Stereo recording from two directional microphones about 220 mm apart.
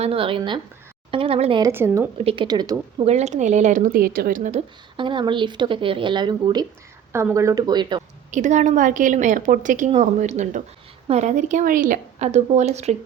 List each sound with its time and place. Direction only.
0.0 s speech: 25° right (ahead or behind)
2.1 s speech: 25° right (ahead or behind)
3.1 s a woman's voice: 30° right (ahead or behind)
4.9 s speech: 20° right (ahead or behind)
8.3 s a woman's voice: 35° right (ahead or behind)